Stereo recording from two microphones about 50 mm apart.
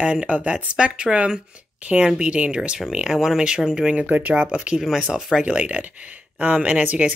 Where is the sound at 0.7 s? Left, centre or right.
Centre.